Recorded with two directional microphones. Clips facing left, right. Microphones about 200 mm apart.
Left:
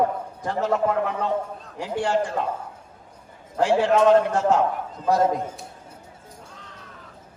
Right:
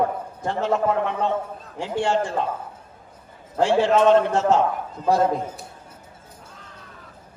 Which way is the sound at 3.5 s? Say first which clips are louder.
Right 1 dB; 25° right (ahead or behind).